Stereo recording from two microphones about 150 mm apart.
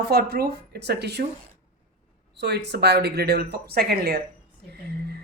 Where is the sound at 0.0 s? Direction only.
90° right.